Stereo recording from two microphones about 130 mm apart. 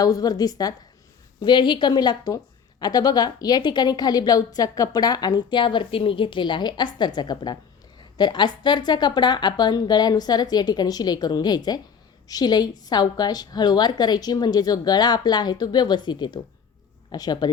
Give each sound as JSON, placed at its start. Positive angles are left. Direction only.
{"t": 0.0, "sound": "a woman's voice", "side_deg": 30}